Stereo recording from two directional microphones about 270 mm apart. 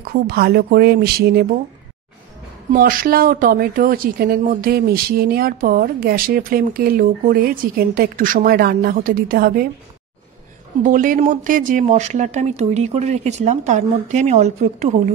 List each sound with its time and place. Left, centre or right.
0.1 s speech: right
2.7 s speech: right
10.8 s speech: right